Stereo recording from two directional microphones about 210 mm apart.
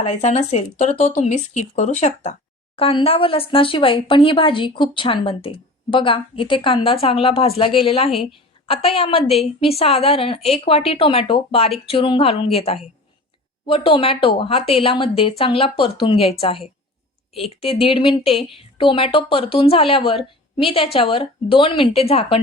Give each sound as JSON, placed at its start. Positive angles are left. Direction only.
{"t": 0.1, "sound": "speech", "side_deg": 30}